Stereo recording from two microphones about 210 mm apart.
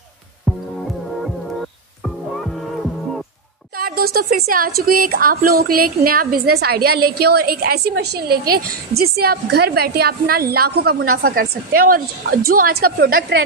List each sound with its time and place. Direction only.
3.7 s a woman's voice: 45° right (ahead or behind)